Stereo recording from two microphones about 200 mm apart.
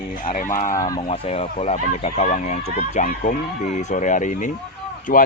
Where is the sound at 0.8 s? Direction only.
20° left (ahead or behind).